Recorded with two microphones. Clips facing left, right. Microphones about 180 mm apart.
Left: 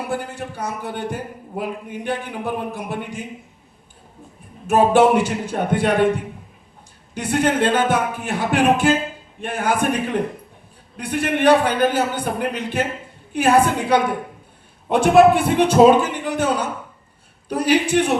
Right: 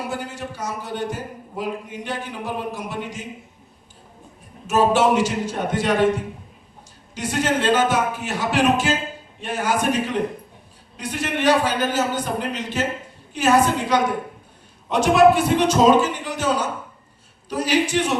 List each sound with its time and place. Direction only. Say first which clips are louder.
0.1 s a man's voice: left 3 dB; 55° left (ahead or behind)
4.6 s a man's voice: left 3 dB; 55° left (ahead or behind)
7.1 s a man's voice: left 3 dB; 55° left (ahead or behind)